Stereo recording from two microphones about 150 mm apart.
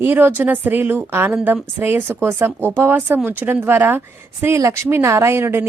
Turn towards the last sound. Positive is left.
turn(degrees=-15)  # may be behind; listen again after turning